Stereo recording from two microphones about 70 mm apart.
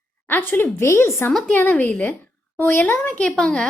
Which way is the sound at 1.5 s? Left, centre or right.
Left.